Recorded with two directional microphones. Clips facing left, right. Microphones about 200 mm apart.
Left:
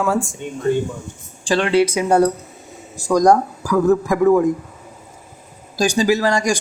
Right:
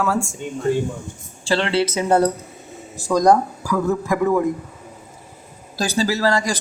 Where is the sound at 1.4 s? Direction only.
15° left (ahead or behind).